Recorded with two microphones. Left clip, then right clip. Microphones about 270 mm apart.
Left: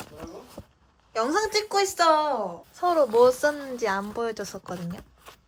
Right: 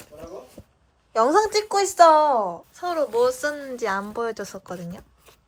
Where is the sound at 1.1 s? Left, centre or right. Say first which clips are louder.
Right 6 dB; centre.